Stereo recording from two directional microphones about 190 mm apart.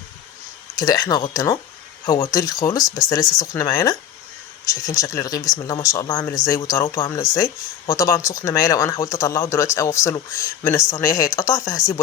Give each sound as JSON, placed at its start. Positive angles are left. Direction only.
{"t": 0.8, "sound": "speech", "side_deg": 20}